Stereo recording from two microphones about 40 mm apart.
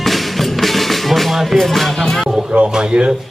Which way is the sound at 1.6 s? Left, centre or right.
Centre.